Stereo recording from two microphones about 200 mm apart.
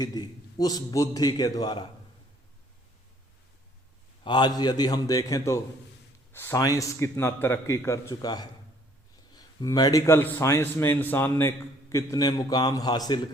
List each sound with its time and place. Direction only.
0.0 s a man's voice: 20° left (ahead or behind)
4.2 s a man's voice: 20° left (ahead or behind)